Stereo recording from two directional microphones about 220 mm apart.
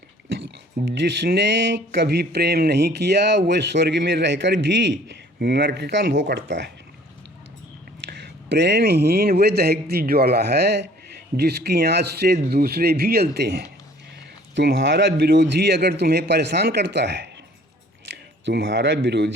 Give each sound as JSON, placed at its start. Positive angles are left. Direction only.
{"t": 0.3, "sound": "speech", "side_deg": -55}
{"t": 8.0, "sound": "speech", "side_deg": -50}
{"t": 18.4, "sound": "speech", "side_deg": -50}